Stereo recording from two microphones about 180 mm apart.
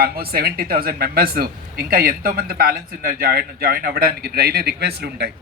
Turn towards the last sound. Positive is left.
turn(degrees=-65)  # may be behind; listen again after turning